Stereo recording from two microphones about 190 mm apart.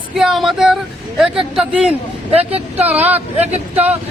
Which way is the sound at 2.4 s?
30° right (ahead or behind).